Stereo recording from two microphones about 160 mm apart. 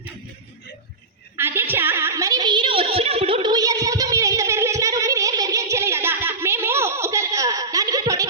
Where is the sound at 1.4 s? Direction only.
15° right (ahead or behind).